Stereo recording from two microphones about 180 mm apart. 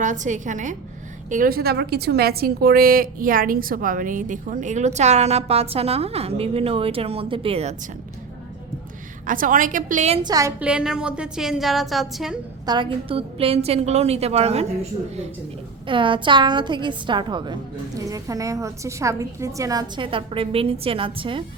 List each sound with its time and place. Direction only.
0.0 s a woman's voice: 45° right (ahead or behind)
9.2 s a woman's voice: 50° right (ahead or behind)
10.2 s a woman's voice: 20° right (ahead or behind)
10.6 s a woman's voice: 5° right (ahead or behind)
12.6 s a woman's voice: 25° right (ahead or behind)
15.9 s a woman's voice: 30° right (ahead or behind)